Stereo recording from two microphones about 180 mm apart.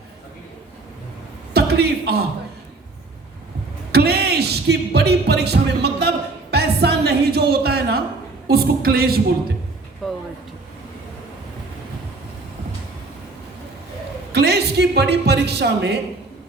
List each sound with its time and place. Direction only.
1.5 s a man's voice: 60° right (ahead or behind)
3.9 s music: 65° right (ahead or behind)
8.4 s a woman's voice: 60° right (ahead or behind)
10.0 s a sound: centre (ahead or behind)
14.3 s a man's voice: 65° right (ahead or behind)